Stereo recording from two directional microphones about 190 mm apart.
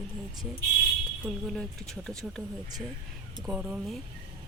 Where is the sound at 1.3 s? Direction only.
Centre (ahead or behind).